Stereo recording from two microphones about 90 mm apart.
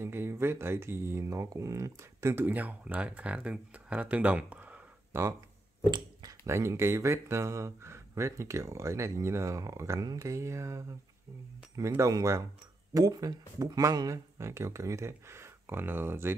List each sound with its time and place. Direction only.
0.0 s speech: 30° right (ahead or behind)
5.1 s speech: 25° right (ahead or behind)
5.9 s speech: 55° right (ahead or behind)
6.4 s speech: 30° right (ahead or behind)
12.0 s speech: 35° right (ahead or behind)